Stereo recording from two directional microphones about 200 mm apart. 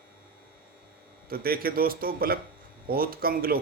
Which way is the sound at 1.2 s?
50° right (ahead or behind).